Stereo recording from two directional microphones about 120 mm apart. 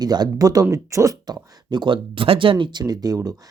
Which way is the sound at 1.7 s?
40° right (ahead or behind).